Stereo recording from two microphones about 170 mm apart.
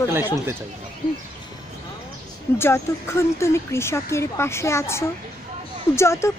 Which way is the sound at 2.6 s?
15° left (ahead or behind).